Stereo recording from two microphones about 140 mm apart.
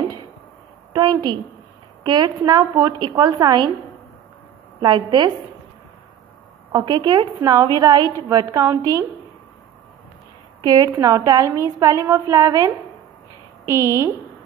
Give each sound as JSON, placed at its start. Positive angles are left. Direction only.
{"t": 0.9, "sound": "a sound", "side_deg": -30}
{"t": 2.0, "sound": "a woman's voice", "side_deg": -30}
{"t": 4.7, "sound": "a woman's voice", "side_deg": -35}
{"t": 6.8, "sound": "a woman's voice", "side_deg": -30}
{"t": 10.6, "sound": "a woman's voice", "side_deg": -25}